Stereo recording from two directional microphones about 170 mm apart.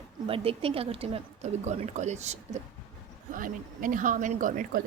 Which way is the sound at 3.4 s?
55° right (ahead or behind).